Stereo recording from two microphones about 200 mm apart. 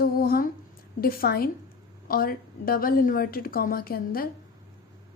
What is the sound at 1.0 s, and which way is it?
Speech, 50° left (ahead or behind).